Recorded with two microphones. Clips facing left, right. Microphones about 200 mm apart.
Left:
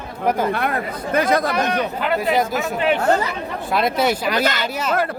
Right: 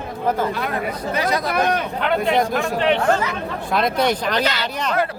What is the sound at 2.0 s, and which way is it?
Speech, 5° left (ahead or behind).